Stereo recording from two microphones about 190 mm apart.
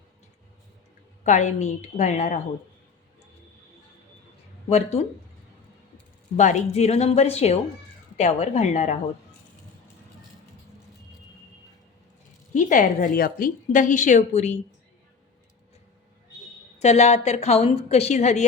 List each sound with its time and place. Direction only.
1.2 s a woman's voice: 40° left (ahead or behind)
4.7 s a woman's voice: 35° left (ahead or behind)
6.3 s a woman's voice: 40° left (ahead or behind)
12.5 s a woman's voice: 45° left (ahead or behind)
16.7 s a woman's voice: 35° left (ahead or behind)